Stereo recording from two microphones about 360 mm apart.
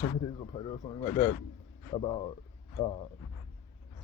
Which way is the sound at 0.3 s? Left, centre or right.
Centre.